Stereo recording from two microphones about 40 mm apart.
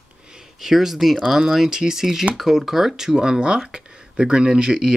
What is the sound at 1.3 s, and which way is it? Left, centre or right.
Speech, centre.